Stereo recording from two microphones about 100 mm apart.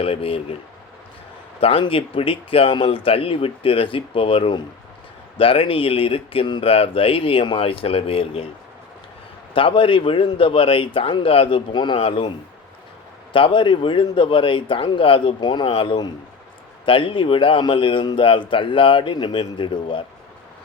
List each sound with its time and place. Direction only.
0.0 s speech: 75° left (ahead or behind)
1.6 s speech: 65° left (ahead or behind)
9.6 s a man's voice: 60° left (ahead or behind)
13.3 s a man's voice: 55° left (ahead or behind)
15.6 s speech: 60° left (ahead or behind)
16.8 s a man's voice: 60° left (ahead or behind)